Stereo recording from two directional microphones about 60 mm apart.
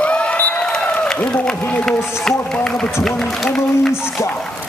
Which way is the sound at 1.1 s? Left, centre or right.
Centre.